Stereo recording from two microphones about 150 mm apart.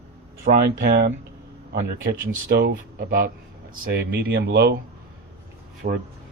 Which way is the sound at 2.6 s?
80° right.